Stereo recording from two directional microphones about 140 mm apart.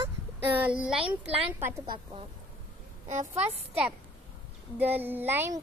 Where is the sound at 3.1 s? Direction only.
60° right (ahead or behind).